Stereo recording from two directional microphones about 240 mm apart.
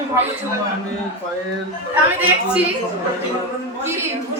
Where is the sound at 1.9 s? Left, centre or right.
Centre.